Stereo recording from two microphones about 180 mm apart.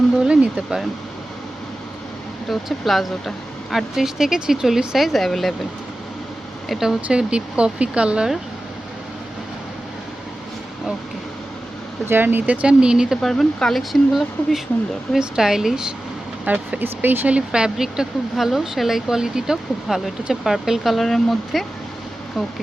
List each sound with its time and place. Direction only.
0.2 s speech: 5° right (ahead or behind)
2.5 s speech: centre (ahead or behind)
6.7 s speech: centre (ahead or behind)
12.0 s speech: 10° right (ahead or behind)